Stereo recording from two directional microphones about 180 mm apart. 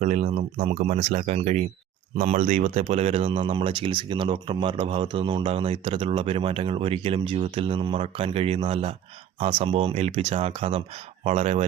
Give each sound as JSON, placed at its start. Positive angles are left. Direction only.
{"t": 0.0, "sound": "speech", "side_deg": -40}